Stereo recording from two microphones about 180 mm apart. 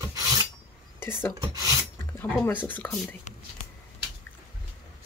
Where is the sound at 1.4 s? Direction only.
20° right (ahead or behind).